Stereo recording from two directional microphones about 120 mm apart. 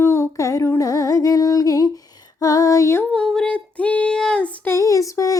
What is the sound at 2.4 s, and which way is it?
Music, 30° left (ahead or behind).